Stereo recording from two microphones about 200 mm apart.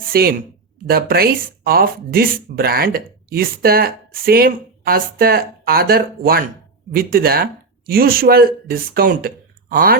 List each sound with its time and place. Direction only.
0.1 s speech: 50° right (ahead or behind)